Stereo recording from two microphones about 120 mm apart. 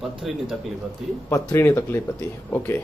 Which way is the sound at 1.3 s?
25° left (ahead or behind).